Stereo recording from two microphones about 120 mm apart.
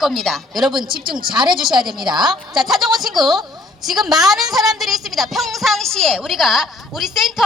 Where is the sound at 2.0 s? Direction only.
40° right (ahead or behind).